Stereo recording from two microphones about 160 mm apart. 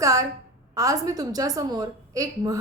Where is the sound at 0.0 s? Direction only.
20° right (ahead or behind).